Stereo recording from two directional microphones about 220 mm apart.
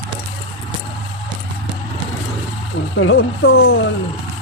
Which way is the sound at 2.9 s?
65° left (ahead or behind).